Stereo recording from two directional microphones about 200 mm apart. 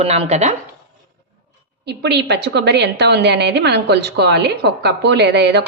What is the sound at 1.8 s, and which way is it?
A woman's voice, 55° right (ahead or behind).